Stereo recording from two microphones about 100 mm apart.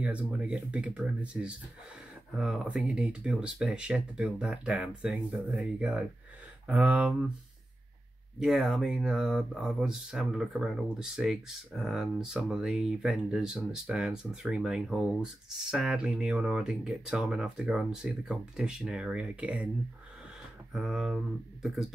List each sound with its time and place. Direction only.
0.4 s speech: 10° right (ahead or behind)
8.4 s speech: 5° right (ahead or behind)
20.7 s speech: 5° right (ahead or behind)